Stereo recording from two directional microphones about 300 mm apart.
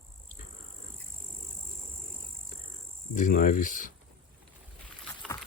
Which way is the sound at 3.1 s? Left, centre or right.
Left.